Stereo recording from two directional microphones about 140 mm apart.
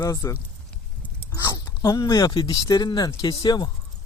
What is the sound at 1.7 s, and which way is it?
Speech, 30° left (ahead or behind).